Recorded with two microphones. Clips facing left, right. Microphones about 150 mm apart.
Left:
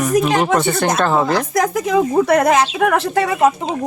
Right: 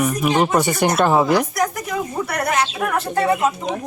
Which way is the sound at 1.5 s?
90° left.